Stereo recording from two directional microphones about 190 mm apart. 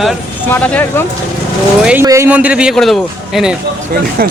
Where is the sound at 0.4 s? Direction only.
10° left (ahead or behind).